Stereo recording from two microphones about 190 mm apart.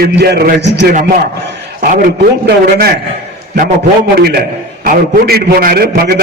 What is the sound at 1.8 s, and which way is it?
A man's voice, 45° right (ahead or behind).